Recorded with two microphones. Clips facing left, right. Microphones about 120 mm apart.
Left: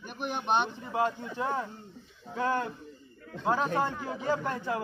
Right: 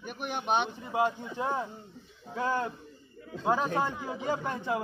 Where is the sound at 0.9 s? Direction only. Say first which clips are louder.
Right 1 dB; 15° right (ahead or behind).